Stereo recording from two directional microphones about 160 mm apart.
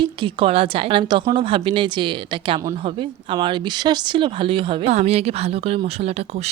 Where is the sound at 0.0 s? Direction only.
30° right (ahead or behind).